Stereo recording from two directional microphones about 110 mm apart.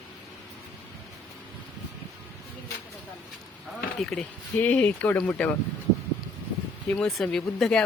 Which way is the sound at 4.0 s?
5° left (ahead or behind).